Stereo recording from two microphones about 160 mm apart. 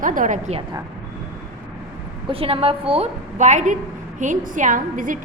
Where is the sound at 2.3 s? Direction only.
35° right (ahead or behind); by 5.2 s 60° right (ahead or behind).